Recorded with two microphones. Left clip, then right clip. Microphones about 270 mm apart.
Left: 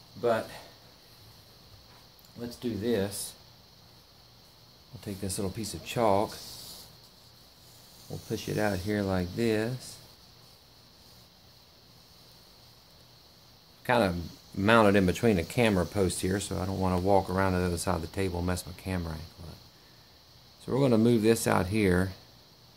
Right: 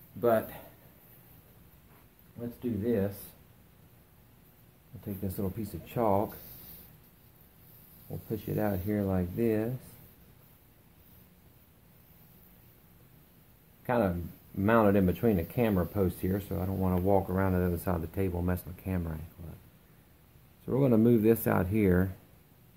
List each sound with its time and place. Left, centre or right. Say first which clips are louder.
2.8 s speech: left 1 dB; left
5.0 s speech: left 2 dB; centre
8.1 s speech: left 2 dB; left
13.8 s speech: left 3 dB; centre
20.6 s speech: left 1 dB; centre